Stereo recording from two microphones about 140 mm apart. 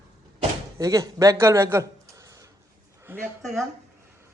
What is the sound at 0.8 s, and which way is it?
Speech, 25° right (ahead or behind).